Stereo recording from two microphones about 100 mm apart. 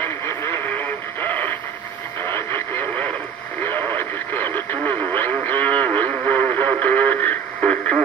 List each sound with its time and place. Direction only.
0.0 s radio: 25° left (ahead or behind)